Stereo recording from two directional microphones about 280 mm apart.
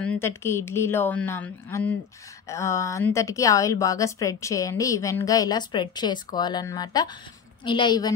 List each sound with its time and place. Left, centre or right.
0.0 s a woman's voice: centre